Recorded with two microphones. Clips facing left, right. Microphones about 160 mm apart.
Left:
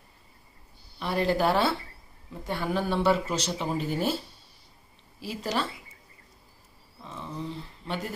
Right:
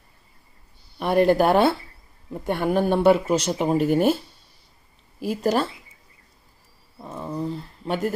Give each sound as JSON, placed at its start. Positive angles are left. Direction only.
{"t": 0.9, "sound": "speech", "side_deg": -55}
{"t": 5.2, "sound": "speech", "side_deg": -50}
{"t": 7.0, "sound": "speech", "side_deg": -45}